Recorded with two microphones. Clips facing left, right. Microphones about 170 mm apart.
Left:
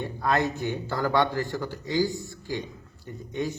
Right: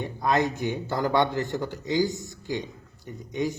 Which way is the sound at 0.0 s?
20° right (ahead or behind).